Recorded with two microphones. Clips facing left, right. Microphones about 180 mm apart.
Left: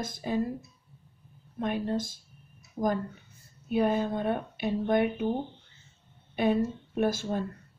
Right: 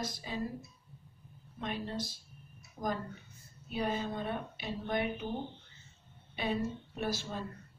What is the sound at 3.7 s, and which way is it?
Speech, 55° left (ahead or behind).